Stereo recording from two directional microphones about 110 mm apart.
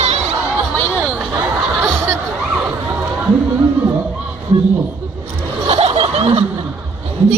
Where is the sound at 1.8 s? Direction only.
25° right (ahead or behind).